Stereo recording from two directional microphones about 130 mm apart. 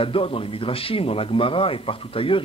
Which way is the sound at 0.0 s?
45° left (ahead or behind).